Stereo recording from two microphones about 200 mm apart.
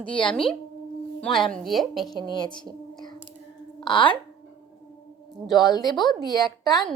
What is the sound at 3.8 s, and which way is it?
Speech, 25° left (ahead or behind).